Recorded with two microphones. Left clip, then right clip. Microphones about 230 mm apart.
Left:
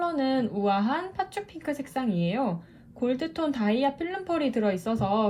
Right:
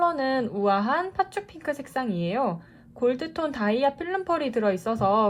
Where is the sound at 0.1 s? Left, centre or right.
Centre.